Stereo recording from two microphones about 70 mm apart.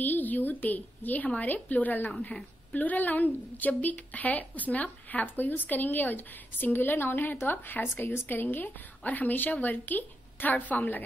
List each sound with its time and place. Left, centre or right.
0.0 s a woman's voice: left